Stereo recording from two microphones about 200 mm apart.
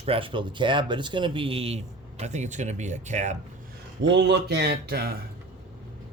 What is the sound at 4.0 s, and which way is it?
Speech, 65° right (ahead or behind).